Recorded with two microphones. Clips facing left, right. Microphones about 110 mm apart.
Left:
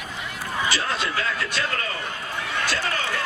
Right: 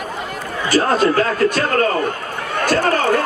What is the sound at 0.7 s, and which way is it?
Speech, 45° right (ahead or behind).